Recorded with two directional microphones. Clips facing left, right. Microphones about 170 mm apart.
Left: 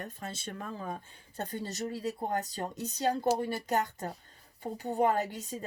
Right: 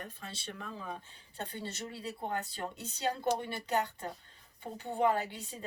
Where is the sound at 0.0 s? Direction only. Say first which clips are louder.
Left 4 dB; 45° left (ahead or behind).